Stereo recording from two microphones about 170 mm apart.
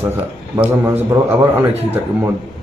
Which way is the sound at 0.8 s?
15° right (ahead or behind).